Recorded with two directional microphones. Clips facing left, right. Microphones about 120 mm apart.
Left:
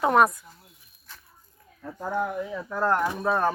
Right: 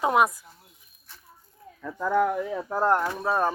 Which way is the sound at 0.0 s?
10° right (ahead or behind).